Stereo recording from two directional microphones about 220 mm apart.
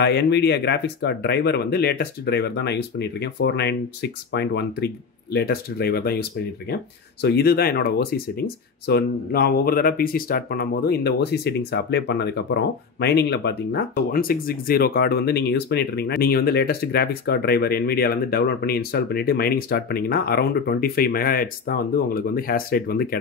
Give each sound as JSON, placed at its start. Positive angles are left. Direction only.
{"t": 0.0, "sound": "speech", "side_deg": 50}